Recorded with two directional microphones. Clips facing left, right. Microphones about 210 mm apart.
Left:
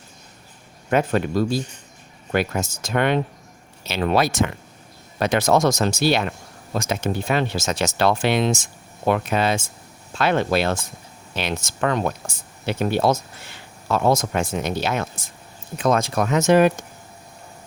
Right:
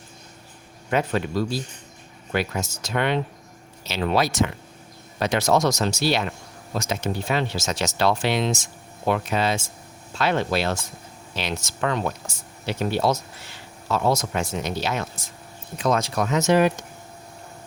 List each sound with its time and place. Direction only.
0.9 s speech: 50° left (ahead or behind)